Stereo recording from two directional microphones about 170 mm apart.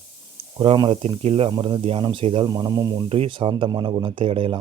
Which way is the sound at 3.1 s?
35° right (ahead or behind).